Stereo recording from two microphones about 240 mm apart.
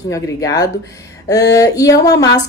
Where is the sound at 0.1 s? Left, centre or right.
Centre.